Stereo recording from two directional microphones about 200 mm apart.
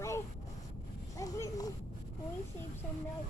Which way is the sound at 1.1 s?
15° left (ahead or behind).